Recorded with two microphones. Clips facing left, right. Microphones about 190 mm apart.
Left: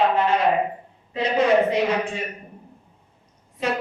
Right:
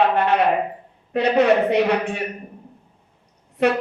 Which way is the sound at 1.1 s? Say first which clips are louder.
Right 3 dB; 65° right (ahead or behind).